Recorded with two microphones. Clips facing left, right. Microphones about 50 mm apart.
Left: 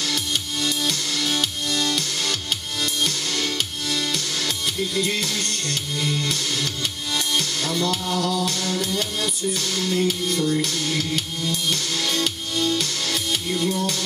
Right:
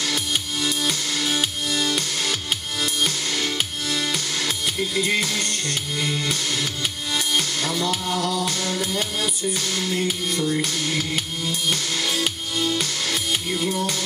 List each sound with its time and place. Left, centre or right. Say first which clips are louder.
0.0 s music: right 1 dB; centre